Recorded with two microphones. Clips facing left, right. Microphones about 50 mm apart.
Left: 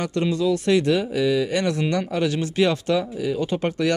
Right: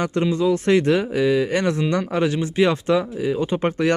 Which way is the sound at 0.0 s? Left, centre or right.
Right.